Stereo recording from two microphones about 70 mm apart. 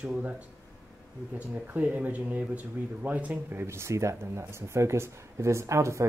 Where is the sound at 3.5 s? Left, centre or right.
Right.